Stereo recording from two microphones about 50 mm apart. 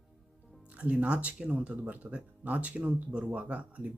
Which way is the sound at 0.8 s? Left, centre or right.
Right.